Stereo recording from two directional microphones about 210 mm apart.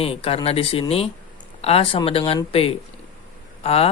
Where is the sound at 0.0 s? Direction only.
30° left (ahead or behind).